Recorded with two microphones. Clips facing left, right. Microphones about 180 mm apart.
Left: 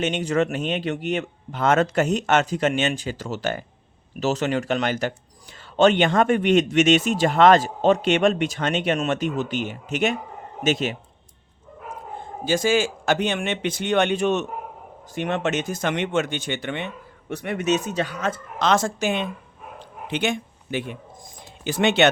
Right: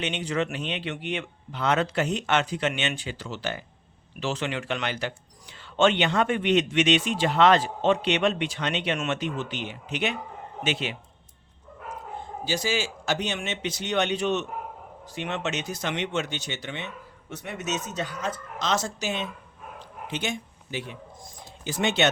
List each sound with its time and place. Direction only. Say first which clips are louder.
0.0 s speech: left 6 dB; 45° left (ahead or behind)
12.5 s speech: left 8 dB; 50° left (ahead or behind)
21.6 s speech: left 6 dB; 70° left (ahead or behind)